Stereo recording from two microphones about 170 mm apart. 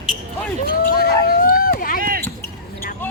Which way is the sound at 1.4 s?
55° left (ahead or behind).